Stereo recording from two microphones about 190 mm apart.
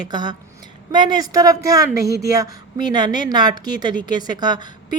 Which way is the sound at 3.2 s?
20° right (ahead or behind).